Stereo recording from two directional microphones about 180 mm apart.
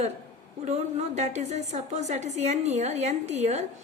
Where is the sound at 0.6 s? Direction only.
40° right (ahead or behind).